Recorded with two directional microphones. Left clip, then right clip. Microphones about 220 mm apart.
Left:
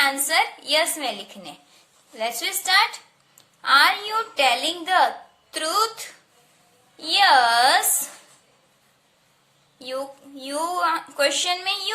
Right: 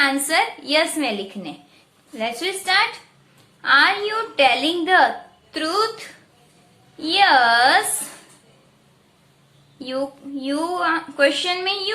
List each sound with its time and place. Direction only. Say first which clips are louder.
0.0 s a woman's voice: right 2 dB; 25° left (ahead or behind)
6.9 s a woman's voice: right 1 dB; 25° left (ahead or behind)
9.7 s a woman's voice: right 4 dB; 25° left (ahead or behind)